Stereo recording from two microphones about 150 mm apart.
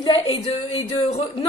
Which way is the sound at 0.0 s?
35° left (ahead or behind).